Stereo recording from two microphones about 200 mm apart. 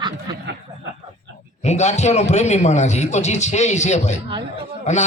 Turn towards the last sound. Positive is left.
turn(degrees=35)  # may be behind; listen again after turning